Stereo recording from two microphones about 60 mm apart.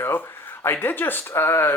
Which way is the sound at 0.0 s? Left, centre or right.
Left.